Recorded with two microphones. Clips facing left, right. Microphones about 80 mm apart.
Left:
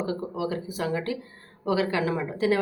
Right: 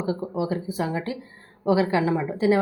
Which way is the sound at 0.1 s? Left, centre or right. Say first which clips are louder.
Right 3 dB; right.